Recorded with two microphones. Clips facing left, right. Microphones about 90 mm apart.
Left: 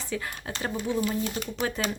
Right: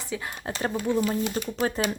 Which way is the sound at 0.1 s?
15° right (ahead or behind).